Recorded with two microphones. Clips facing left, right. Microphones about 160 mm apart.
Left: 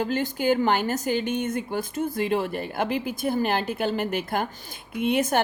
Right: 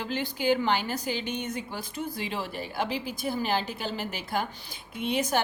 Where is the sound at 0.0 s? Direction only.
45° left (ahead or behind).